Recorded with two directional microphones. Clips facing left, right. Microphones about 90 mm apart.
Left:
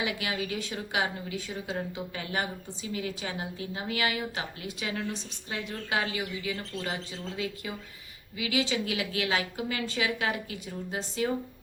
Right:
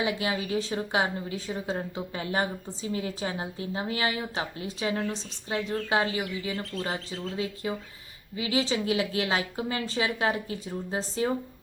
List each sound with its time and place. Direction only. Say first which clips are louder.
0.0 s a woman's voice: right 3 dB; 30° right (ahead or behind)